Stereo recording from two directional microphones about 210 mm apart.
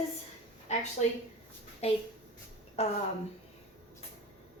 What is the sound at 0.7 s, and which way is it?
A woman's voice, 35° left (ahead or behind).